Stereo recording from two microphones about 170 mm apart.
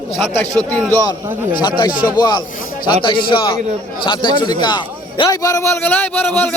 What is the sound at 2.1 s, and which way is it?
A man's voice, 25° left (ahead or behind).